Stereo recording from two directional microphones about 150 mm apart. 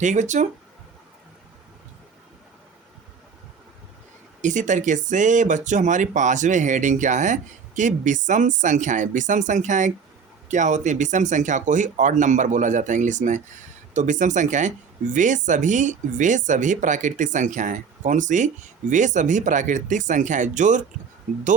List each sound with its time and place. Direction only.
0.0 s speech: 55° right (ahead or behind)
4.4 s speech: 55° right (ahead or behind)